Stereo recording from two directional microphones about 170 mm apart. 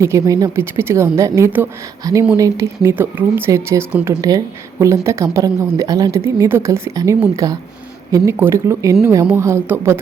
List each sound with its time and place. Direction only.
0.0 s speech: 20° right (ahead or behind)